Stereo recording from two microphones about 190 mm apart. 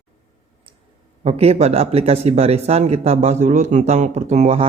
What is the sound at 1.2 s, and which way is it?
A man's voice, 35° right (ahead or behind).